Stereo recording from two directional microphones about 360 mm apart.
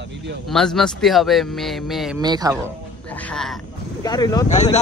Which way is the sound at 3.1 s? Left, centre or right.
Centre.